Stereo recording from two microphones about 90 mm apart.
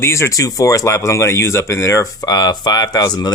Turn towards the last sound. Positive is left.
turn(degrees=45)  # may be behind; listen again after turning